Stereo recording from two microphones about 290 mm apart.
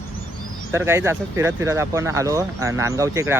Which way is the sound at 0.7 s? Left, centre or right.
Centre.